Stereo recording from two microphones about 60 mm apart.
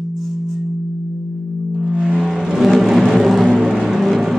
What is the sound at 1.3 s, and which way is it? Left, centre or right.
Singing bowl, centre.